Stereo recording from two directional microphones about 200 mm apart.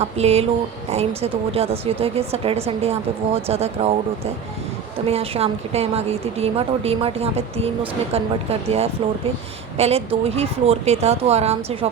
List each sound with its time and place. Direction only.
0.0 s a woman's voice: 30° right (ahead or behind)
5.0 s a woman's voice: 30° right (ahead or behind)